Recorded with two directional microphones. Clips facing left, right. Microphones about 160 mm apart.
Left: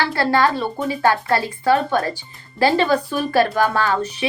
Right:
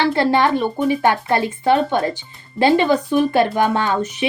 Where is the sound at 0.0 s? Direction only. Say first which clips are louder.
Right 2 dB; 20° right (ahead or behind).